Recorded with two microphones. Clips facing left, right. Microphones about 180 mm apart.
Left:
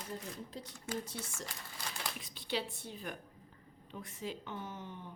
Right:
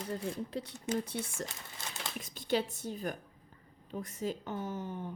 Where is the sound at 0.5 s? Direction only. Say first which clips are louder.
Right 4 dB; 65° right (ahead or behind).